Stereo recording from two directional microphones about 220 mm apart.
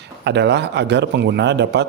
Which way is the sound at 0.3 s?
50° right (ahead or behind).